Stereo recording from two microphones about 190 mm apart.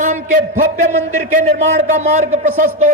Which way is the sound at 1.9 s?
40° right (ahead or behind).